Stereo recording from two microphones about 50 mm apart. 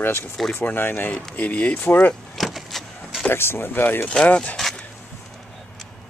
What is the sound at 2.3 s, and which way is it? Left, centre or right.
Vehicle, centre.